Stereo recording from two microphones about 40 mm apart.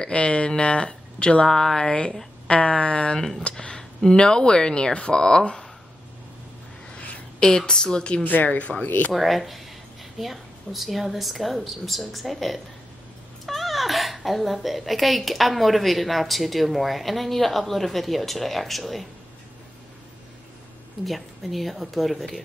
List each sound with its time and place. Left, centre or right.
0.0 s speech: left
1.5 s speech: centre
2.4 s speech: left
7.3 s speech: centre
8.2 s speech: left
9.1 s a woman's voice: centre
21.0 s a woman's voice: centre